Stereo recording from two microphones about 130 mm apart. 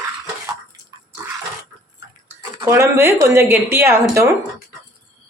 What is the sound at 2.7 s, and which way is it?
Speech, 20° right (ahead or behind).